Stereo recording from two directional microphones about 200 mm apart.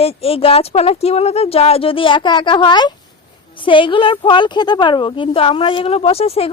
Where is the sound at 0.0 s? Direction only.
30° left (ahead or behind).